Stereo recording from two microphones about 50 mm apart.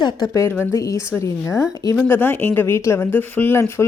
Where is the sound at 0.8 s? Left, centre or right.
Left.